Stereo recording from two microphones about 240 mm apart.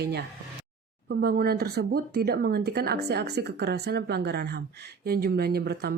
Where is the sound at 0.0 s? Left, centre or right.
Right.